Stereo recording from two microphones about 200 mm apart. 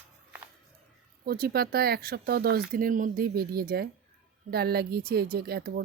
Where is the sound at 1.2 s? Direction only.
50° right (ahead or behind).